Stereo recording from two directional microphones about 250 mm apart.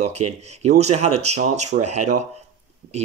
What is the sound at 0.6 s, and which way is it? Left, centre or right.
Speech, right.